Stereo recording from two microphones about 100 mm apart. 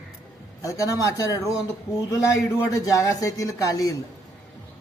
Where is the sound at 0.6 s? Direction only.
35° left (ahead or behind).